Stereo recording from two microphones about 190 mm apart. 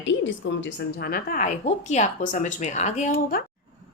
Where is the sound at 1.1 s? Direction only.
50° left (ahead or behind).